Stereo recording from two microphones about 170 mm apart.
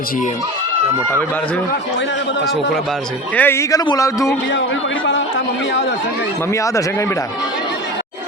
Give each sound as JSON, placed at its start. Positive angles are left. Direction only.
{"t": 3.3, "sound": "a man's voice", "side_deg": 15}
{"t": 6.5, "sound": "speech", "side_deg": 20}